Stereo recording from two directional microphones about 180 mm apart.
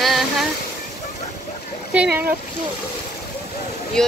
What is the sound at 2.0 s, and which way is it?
Speech, 10° right (ahead or behind).